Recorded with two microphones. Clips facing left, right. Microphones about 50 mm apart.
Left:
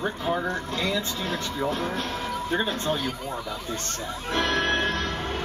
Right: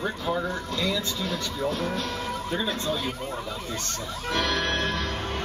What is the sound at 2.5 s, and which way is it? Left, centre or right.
Speech, left.